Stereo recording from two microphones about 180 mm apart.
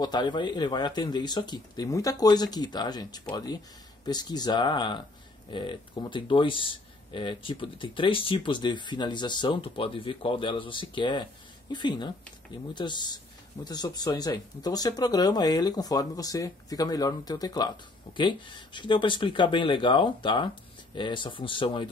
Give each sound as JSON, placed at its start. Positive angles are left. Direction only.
{"t": 0.0, "sound": "speech", "side_deg": 25}